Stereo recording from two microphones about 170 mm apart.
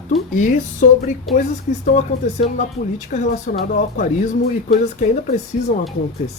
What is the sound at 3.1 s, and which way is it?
Speech, 45° left (ahead or behind).